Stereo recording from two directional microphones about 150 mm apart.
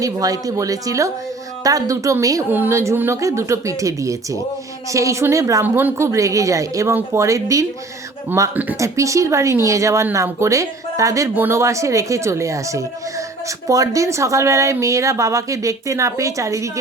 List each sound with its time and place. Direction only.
0.0 s speech: 25° right (ahead or behind)